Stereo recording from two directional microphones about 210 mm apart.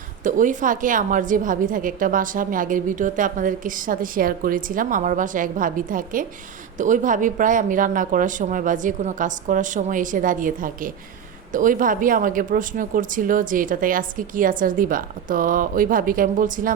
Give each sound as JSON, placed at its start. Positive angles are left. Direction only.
{"t": 0.3, "sound": "a woman's voice", "side_deg": -40}